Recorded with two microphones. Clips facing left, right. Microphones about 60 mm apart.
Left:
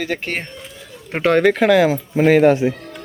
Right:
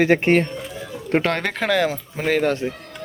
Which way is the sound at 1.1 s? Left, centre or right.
Centre.